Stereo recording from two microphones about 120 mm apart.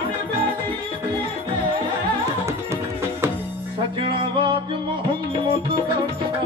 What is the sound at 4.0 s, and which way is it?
Music, 45° right (ahead or behind).